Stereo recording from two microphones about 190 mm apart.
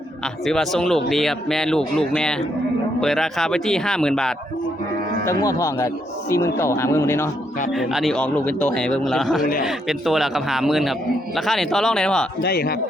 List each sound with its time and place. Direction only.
0.4 s speech: centre (ahead or behind)
5.2 s speech: 15° left (ahead or behind)
7.8 s speech: centre (ahead or behind)
12.4 s a man's voice: 55° left (ahead or behind)